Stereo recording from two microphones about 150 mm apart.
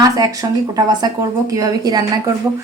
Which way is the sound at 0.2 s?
25° right (ahead or behind).